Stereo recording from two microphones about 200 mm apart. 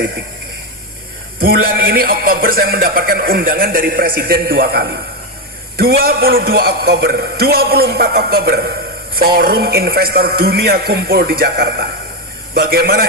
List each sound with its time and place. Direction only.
1.4 s a man's voice: 45° right (ahead or behind)